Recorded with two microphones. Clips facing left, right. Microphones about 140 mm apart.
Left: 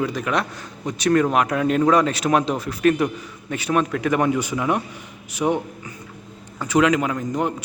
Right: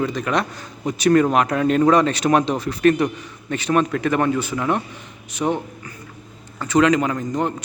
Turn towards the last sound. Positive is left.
turn(degrees=10)  # may be behind; listen again after turning